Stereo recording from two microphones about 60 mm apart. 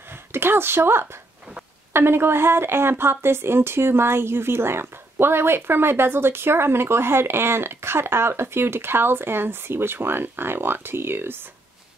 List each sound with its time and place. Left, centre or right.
0.3 s a woman's voice: right